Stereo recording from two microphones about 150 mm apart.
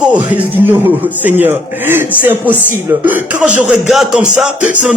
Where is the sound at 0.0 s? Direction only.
10° right (ahead or behind).